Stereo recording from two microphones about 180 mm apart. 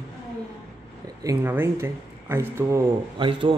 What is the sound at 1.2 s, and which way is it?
Speech, 15° right (ahead or behind).